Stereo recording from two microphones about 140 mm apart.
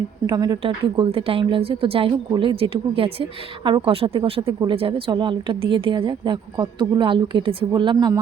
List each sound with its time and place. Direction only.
0.3 s a woman's voice: 30° right (ahead or behind)
0.6 s a woman's voice: 40° right (ahead or behind)